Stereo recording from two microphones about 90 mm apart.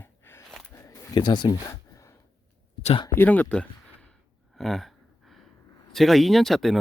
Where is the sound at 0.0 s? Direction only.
25° left (ahead or behind).